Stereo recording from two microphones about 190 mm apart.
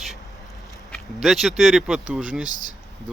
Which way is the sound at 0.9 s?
Centre (ahead or behind).